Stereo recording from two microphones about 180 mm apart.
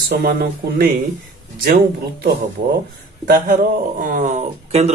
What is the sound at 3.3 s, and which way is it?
Speech, 50° right (ahead or behind).